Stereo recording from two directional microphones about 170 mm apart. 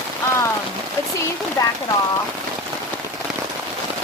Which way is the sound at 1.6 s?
20° left (ahead or behind).